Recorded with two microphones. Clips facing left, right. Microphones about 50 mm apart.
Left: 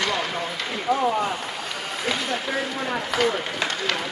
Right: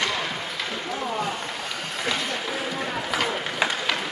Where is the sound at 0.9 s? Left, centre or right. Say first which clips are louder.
Left 12 dB; centre.